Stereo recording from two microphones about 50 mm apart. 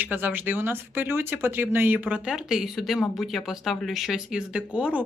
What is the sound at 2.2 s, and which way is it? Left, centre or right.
Speech, centre.